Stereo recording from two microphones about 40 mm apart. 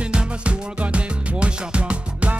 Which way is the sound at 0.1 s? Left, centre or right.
Right.